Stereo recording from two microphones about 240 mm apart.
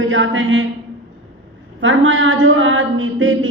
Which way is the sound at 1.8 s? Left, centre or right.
Right.